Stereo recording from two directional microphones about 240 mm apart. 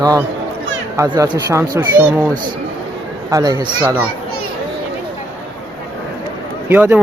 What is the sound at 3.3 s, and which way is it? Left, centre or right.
Speech, centre.